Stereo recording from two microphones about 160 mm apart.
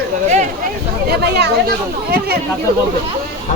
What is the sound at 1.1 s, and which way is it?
Speech, 85° right.